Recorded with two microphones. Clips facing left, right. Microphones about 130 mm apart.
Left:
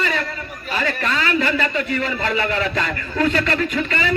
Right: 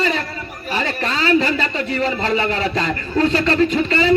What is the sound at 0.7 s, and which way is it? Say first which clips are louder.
A man's voice: even; 30° right (ahead or behind).